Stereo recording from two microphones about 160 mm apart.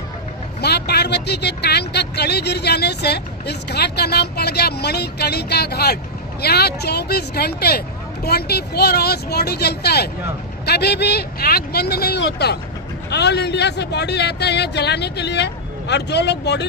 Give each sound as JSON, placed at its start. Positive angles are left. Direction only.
{"t": 0.6, "sound": "speech", "side_deg": 90}